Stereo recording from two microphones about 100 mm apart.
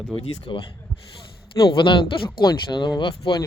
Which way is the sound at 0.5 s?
55° left (ahead or behind).